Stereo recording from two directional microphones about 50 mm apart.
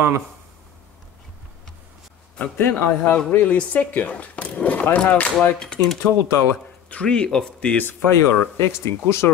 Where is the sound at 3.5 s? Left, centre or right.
Left.